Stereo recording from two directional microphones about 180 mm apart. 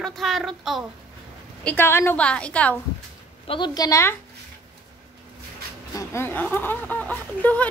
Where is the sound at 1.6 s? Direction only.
10° left (ahead or behind).